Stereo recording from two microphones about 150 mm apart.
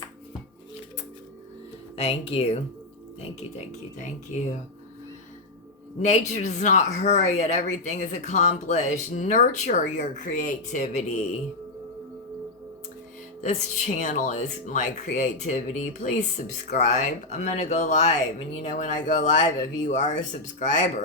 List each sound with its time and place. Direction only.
2.0 s speech: 40° left (ahead or behind)
3.9 s speech: 55° left (ahead or behind)
6.1 s speech: 50° left (ahead or behind)
13.4 s speech: 50° left (ahead or behind)